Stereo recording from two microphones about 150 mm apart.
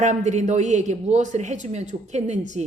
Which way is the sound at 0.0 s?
50° right (ahead or behind).